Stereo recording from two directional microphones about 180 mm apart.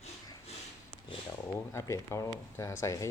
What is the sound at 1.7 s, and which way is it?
Speech, 15° left (ahead or behind).